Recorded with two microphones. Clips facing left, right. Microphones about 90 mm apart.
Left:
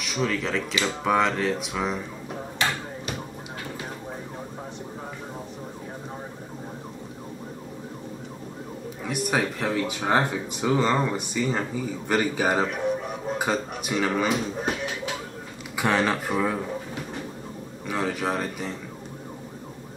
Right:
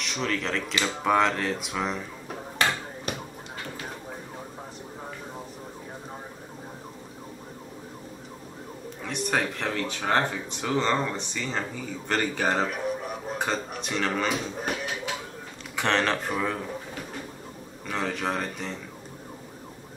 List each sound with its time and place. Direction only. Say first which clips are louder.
0.0 s speech: left 3 dB; 5° left (ahead or behind)
9.0 s speech: left 2 dB; 5° left (ahead or behind)
12.7 s music: left 3 dB; 35° left (ahead or behind)
13.4 s speech: left 2 dB; 10° left (ahead or behind)
15.7 s speech: left 2 dB; 10° left (ahead or behind)
17.8 s speech: left 2 dB; 5° left (ahead or behind)